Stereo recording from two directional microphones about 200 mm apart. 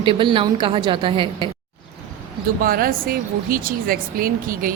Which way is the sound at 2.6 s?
45° right (ahead or behind).